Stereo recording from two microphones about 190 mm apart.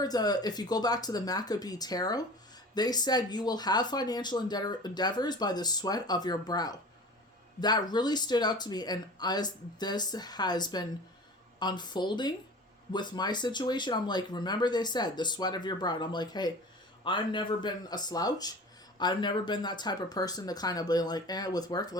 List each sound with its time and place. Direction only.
0.0 s speech: 20° left (ahead or behind)